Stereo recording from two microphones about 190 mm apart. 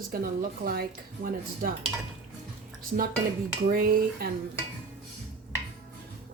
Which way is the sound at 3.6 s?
55° right (ahead or behind).